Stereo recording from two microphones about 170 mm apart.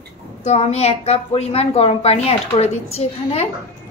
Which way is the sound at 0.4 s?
40° left (ahead or behind).